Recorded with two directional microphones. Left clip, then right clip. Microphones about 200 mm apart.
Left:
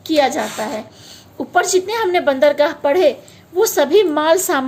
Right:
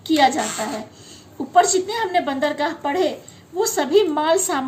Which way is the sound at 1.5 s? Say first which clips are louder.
Left 1 dB; 50° left (ahead or behind).